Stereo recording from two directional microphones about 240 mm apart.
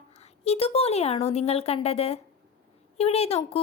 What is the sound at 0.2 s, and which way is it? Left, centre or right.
A woman's voice, left.